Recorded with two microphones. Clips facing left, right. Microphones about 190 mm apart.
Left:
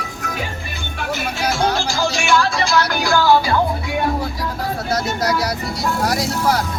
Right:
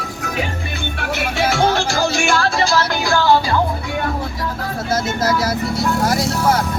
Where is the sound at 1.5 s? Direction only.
70° right (ahead or behind); by 2.5 s 55° right (ahead or behind).